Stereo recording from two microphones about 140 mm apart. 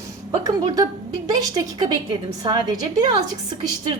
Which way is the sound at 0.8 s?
25° right (ahead or behind).